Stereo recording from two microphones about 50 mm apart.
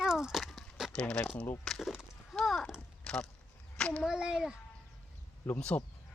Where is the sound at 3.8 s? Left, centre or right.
Left.